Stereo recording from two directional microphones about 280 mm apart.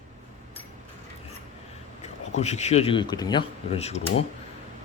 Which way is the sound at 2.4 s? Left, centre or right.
Left.